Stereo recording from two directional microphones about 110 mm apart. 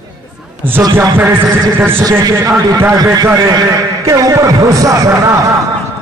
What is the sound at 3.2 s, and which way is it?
A man's voice, 25° right (ahead or behind).